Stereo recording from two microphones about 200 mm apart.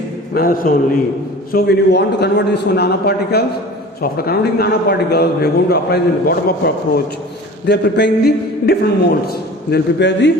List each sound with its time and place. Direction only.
0.3 s a man's voice: 45° left (ahead or behind); by 10.3 s 60° left (ahead or behind)